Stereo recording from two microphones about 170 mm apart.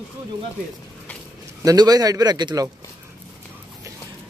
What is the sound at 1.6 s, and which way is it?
Speech, 20° right (ahead or behind).